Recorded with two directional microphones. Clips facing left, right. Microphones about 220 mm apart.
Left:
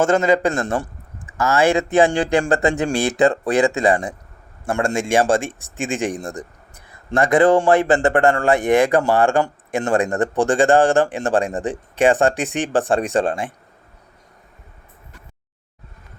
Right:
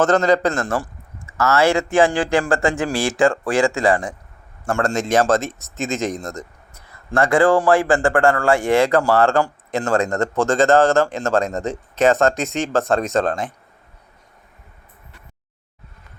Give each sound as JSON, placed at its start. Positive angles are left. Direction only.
{"t": 0.0, "sound": "a man's voice", "side_deg": 10}
{"t": 5.5, "sound": "speech", "side_deg": 30}
{"t": 5.7, "sound": "a man's voice", "side_deg": 15}